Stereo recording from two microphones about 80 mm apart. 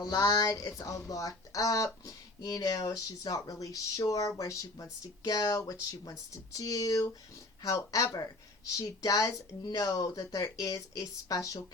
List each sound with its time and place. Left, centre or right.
0.0 s speech: left